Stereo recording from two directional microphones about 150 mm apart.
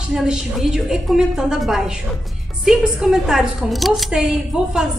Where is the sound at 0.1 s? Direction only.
5° right (ahead or behind).